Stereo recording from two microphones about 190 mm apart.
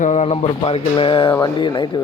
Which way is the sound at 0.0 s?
40° left (ahead or behind).